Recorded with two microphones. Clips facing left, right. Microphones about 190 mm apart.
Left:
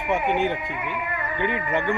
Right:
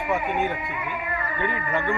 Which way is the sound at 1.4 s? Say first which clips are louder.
Left 3 dB; 20° left (ahead or behind).